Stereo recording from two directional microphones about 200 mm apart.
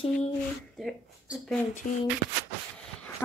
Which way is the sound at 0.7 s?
5° right (ahead or behind).